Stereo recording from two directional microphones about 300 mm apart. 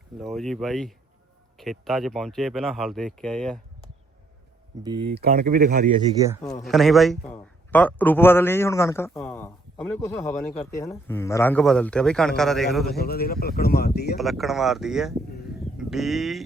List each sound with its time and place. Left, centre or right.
0.2 s a man's voice: centre
4.7 s speech: centre
5.1 s speech: right
6.4 s a man's voice: centre
13.0 s speech: left
14.2 s a man's voice: centre